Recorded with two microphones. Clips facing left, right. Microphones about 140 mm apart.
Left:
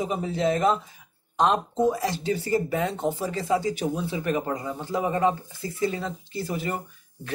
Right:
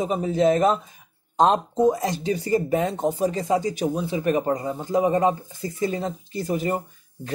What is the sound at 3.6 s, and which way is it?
Speech, 15° right (ahead or behind).